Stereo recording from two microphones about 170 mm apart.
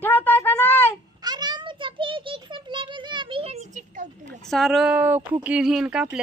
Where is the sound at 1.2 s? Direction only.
25° right (ahead or behind); by 4.1 s 45° right (ahead or behind).